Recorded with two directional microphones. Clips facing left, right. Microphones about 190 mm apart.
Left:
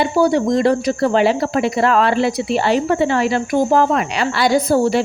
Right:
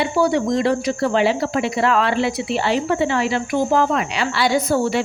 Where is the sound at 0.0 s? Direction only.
40° left (ahead or behind).